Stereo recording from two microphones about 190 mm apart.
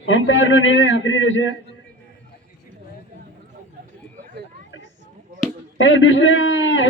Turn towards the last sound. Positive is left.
turn(degrees=90)